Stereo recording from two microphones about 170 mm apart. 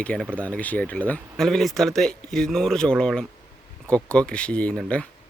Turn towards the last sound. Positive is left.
turn(degrees=5)  # may be behind; listen again after turning